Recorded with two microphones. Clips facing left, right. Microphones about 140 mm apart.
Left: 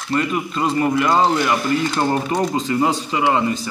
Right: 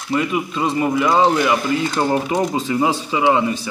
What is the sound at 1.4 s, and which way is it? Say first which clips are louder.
Speech: right 1 dB; 15° right (ahead or behind).